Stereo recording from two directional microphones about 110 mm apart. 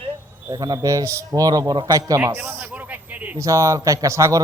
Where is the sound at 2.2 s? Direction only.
20° right (ahead or behind).